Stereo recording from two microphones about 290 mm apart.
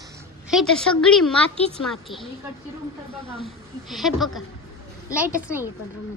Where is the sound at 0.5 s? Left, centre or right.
Centre.